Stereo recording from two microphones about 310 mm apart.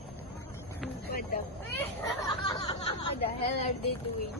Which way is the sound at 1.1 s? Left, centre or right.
Left.